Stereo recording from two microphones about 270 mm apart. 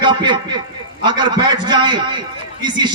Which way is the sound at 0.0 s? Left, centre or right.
Centre.